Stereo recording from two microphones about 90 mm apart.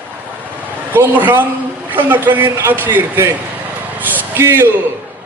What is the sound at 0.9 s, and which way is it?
A man's voice, 20° right (ahead or behind).